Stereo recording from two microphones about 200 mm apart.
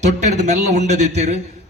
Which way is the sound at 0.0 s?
35° right (ahead or behind).